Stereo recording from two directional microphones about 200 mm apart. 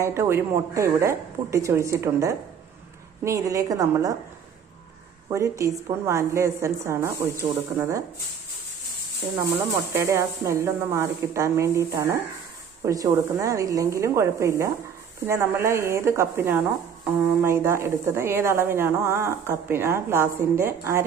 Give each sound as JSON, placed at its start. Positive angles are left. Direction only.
{"t": 0.0, "sound": "speech", "side_deg": -10}
{"t": 5.3, "sound": "speech", "side_deg": -15}
{"t": 9.4, "sound": "speech", "side_deg": -15}